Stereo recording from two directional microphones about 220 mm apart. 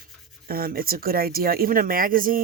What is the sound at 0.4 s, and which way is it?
Speech, 40° right (ahead or behind).